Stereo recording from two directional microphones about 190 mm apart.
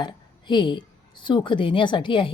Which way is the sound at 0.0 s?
25° left (ahead or behind).